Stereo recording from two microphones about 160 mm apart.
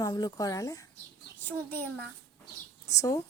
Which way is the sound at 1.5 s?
10° left (ahead or behind).